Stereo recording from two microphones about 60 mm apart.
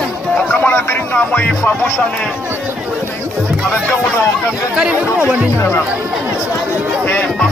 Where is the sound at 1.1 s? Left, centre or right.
Left.